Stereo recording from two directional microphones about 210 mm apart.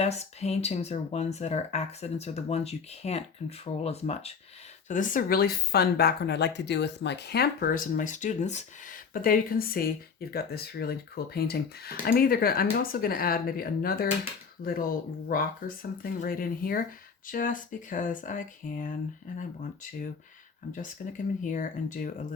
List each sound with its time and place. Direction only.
0.0 s speech: 30° left (ahead or behind)
21.4 s speech: 40° left (ahead or behind)